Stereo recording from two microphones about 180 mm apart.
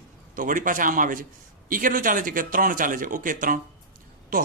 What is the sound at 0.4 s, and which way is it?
A man's voice, 50° right (ahead or behind).